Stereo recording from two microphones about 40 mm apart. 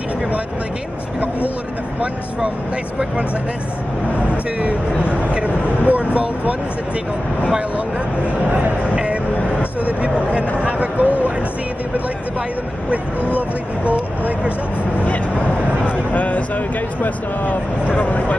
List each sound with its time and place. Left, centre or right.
4.3 s speech: right
8.5 s speech: right
8.9 s speech: right
13.8 s speech: right
15.8 s speech: left